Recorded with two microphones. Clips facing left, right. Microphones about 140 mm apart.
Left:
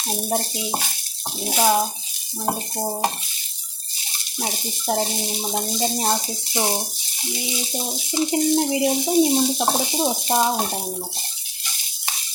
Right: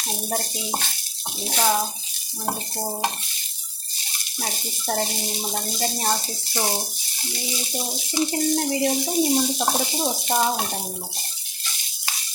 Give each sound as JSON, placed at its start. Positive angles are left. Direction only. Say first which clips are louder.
{"t": 0.3, "sound": "water tap", "louder": "left 3 dB", "side_deg": 15}
{"t": 4.4, "sound": "water tap", "louder": "left 3 dB", "side_deg": 15}